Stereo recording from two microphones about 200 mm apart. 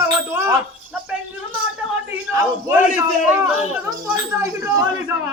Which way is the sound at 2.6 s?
5° right (ahead or behind).